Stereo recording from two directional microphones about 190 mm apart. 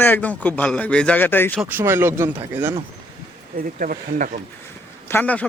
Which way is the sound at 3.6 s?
45° right (ahead or behind).